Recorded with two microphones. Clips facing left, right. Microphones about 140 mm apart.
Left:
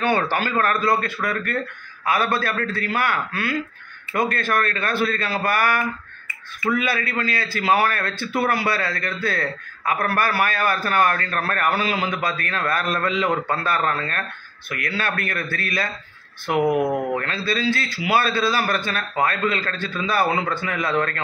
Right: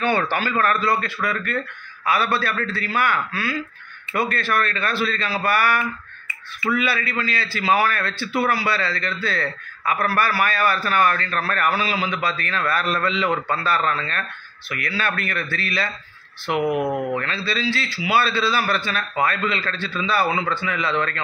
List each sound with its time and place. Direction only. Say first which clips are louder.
0.3 s a man's voice: even; 45° left (ahead or behind)
16.7 s speech: left 2 dB; centre (ahead or behind)
17.1 s a man's voice: left 1 dB; 50° left (ahead or behind)